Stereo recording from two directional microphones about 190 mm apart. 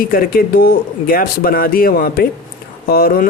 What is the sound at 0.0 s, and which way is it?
A woman's voice, 50° left (ahead or behind).